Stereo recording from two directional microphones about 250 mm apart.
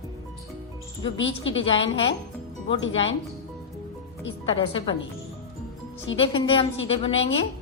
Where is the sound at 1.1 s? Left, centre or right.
Left.